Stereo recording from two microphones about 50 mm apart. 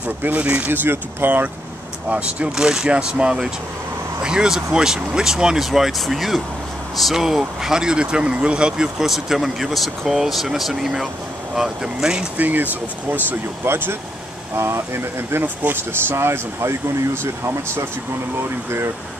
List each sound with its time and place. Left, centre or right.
0.2 s speech: right
0.7 s speech: right
2.0 s speech: right
2.5 s speech: centre
12.4 s speech: right
13.7 s speech: right
14.5 s speech: right